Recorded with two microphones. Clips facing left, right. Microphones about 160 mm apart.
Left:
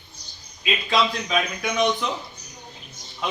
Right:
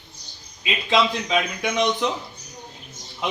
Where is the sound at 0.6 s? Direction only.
20° right (ahead or behind).